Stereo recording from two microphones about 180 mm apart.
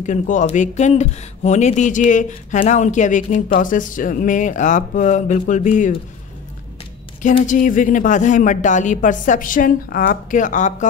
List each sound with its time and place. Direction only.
0.0 s speech: 45° left (ahead or behind)
7.4 s speech: 45° left (ahead or behind)